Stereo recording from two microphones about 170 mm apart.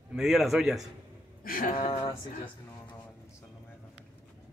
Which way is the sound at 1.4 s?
55° left (ahead or behind).